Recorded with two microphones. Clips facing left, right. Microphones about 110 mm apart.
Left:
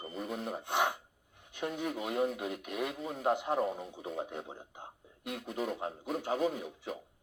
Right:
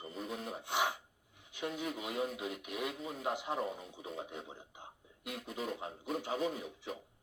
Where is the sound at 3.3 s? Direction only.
50° left (ahead or behind).